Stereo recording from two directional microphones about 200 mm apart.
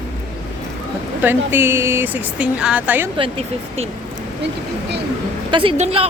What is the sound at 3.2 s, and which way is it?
Speech, 30° right (ahead or behind).